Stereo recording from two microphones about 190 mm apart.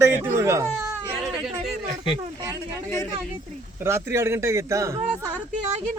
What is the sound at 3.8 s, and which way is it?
A man's voice, 15° right (ahead or behind).